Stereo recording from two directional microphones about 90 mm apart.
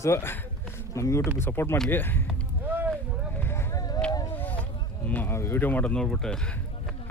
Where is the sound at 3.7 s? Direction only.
45° left (ahead or behind).